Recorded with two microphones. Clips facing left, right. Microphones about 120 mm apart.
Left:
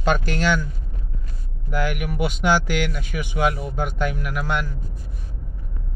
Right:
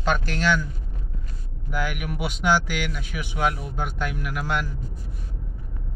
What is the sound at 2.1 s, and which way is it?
Speech, 5° right (ahead or behind).